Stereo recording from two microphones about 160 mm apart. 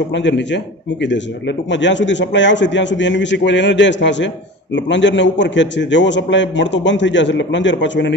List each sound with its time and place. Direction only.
0.3 s a man's voice: 90° left
1.7 s a man's voice: 90° left